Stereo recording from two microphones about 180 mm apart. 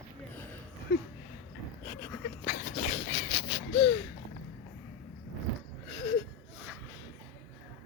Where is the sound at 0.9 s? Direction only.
65° left (ahead or behind).